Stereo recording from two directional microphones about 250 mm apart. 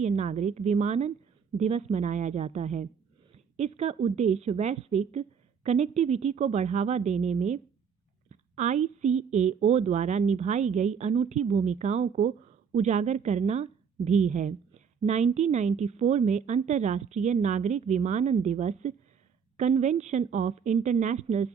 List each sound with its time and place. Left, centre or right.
0.0 s a woman's voice: right